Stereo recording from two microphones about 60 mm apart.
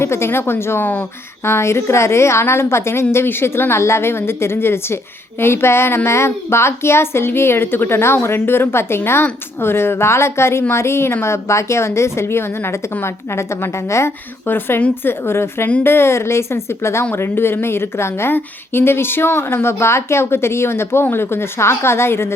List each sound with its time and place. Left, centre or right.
0.0 s speech: left
14.4 s a woman's voice: left